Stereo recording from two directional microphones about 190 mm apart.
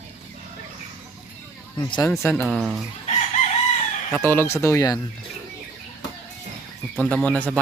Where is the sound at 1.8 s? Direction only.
25° left (ahead or behind).